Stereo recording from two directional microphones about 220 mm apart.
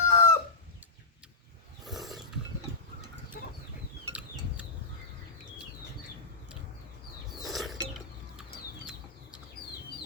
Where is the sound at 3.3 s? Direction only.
40° left (ahead or behind).